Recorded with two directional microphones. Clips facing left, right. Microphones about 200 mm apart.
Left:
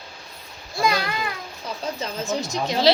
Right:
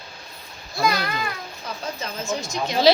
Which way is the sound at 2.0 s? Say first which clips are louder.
Left 2 dB; 35° left (ahead or behind).